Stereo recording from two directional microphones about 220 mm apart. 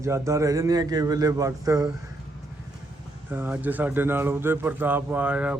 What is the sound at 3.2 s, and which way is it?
A man's voice, 10° right (ahead or behind).